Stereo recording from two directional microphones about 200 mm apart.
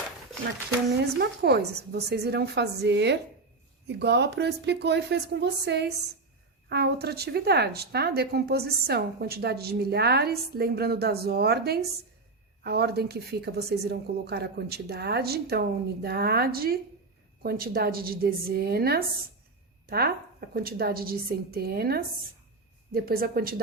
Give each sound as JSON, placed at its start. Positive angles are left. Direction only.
{"t": 0.9, "sound": "a woman's voice", "side_deg": -55}